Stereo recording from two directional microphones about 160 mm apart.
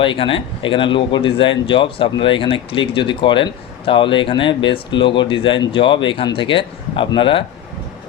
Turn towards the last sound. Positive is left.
turn(degrees=30)  # may be behind; listen again after turning